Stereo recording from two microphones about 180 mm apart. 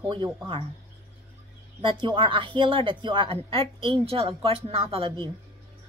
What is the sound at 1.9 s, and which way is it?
Speech, 30° right (ahead or behind).